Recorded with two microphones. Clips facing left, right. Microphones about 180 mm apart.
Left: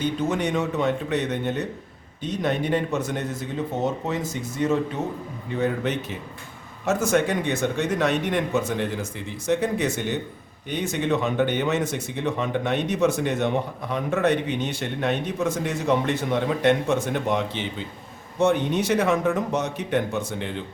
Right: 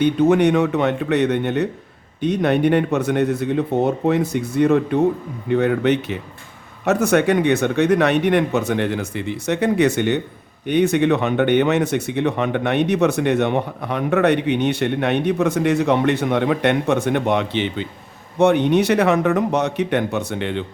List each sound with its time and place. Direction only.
0.0 s speech: 65° right (ahead or behind)